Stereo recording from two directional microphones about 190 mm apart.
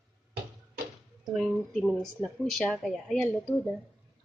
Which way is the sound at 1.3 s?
Centre (ahead or behind).